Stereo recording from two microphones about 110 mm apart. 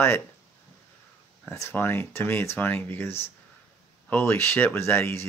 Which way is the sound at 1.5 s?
25° left (ahead or behind).